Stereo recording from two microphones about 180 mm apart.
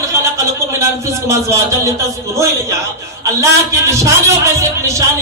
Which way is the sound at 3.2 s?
15° right (ahead or behind).